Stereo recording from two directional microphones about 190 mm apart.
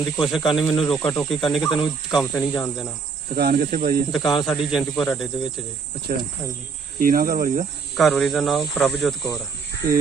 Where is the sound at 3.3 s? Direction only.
50° right (ahead or behind).